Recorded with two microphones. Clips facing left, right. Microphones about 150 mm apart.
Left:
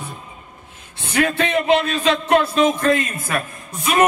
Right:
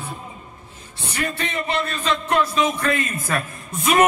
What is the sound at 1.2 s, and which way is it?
Speech, 80° left.